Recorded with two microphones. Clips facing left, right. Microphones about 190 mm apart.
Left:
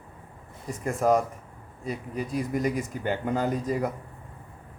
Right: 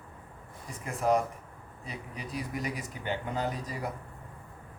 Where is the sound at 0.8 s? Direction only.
45° left (ahead or behind).